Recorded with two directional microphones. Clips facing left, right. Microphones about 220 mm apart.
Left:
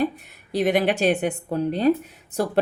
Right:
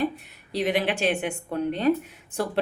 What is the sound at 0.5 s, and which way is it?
A woman's voice, 50° left (ahead or behind).